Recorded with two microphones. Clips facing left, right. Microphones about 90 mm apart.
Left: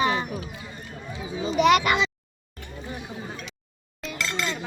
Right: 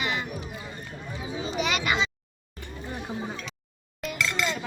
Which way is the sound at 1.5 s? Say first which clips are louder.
Left 9 dB; 60° left (ahead or behind).